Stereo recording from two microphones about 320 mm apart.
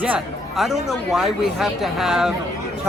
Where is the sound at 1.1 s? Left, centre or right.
Centre.